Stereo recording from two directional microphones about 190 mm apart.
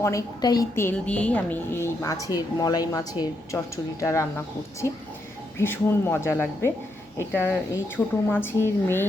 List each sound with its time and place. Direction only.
0.0 s a woman's voice: 15° left (ahead or behind)